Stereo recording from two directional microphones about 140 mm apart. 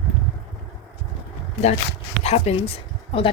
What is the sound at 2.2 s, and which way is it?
Speech, 50° left (ahead or behind).